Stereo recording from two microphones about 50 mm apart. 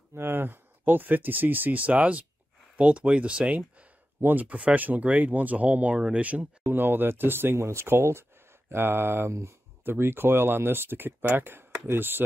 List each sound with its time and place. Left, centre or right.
0.1 s speech: right
4.2 s speech: right
4.5 s speech: right
6.6 s speech: right
9.3 s speech: right
9.8 s speech: right